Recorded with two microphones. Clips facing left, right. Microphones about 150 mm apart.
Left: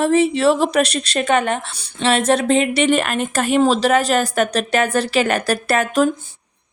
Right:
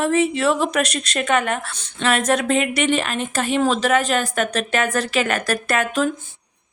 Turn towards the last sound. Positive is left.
turn(degrees=40)  # may be behind; listen again after turning